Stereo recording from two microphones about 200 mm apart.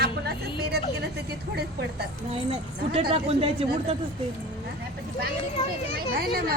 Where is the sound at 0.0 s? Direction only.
55° right (ahead or behind).